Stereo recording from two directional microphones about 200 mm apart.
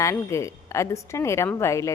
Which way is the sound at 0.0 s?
15° left (ahead or behind).